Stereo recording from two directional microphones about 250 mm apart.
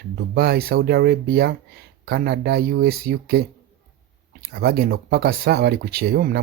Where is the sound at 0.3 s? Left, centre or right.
Right.